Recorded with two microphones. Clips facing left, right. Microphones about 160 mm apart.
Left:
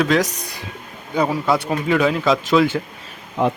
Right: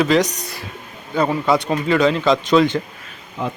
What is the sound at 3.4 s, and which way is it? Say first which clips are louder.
Speech: left 6 dB; 65° left (ahead or behind).